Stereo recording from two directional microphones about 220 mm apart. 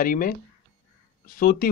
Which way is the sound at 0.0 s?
40° left (ahead or behind).